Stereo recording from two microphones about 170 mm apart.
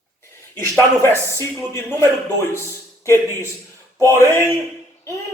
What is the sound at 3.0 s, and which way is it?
A man's voice, 15° left (ahead or behind).